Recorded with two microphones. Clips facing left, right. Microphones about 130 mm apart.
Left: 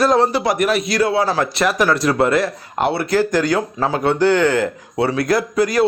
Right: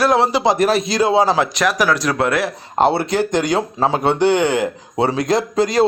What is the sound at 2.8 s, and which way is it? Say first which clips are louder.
Speech: right 1 dB; 30° right (ahead or behind).